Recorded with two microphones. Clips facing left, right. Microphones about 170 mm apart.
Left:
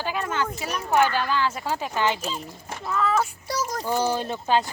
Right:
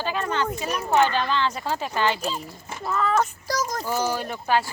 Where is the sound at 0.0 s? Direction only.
10° left (ahead or behind).